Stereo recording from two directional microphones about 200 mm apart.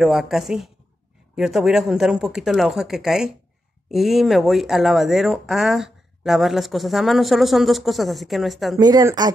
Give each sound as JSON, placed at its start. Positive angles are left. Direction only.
{"t": 0.0, "sound": "speech", "side_deg": 0}
{"t": 8.7, "sound": "speech", "side_deg": -20}